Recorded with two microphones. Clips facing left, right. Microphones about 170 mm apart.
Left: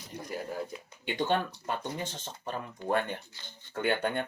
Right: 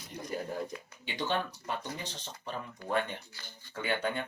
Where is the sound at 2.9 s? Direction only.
50° left (ahead or behind).